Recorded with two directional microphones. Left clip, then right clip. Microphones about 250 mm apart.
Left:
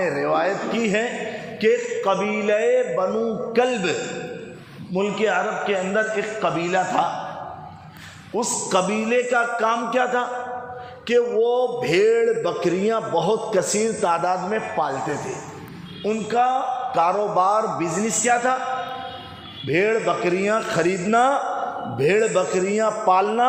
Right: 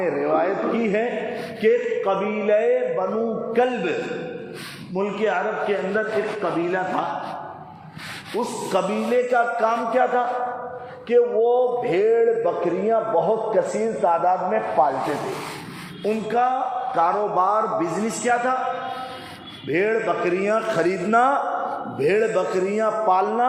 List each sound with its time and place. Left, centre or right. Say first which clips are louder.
0.0 s a sound: even; left
1.6 s speech: even; left
4.9 s speech: left 2 dB; left
8.4 s speech: left 2 dB; left
16.0 s speech: left 1 dB; left
19.6 s speech: left 1 dB; left